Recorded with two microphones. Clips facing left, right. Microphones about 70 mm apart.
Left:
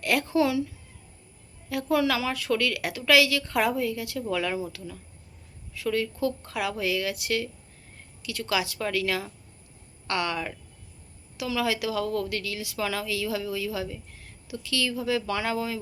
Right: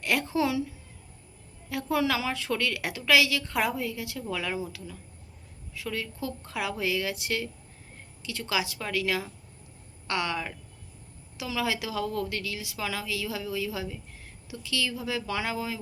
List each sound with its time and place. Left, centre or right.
0.0 s a woman's voice: centre
1.7 s a woman's voice: centre